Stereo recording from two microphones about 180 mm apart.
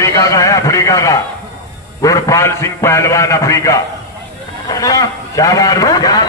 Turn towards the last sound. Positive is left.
turn(degrees=20)  # may be behind; listen again after turning